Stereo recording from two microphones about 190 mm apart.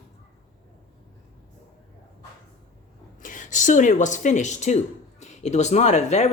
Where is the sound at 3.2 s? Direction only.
40° left (ahead or behind).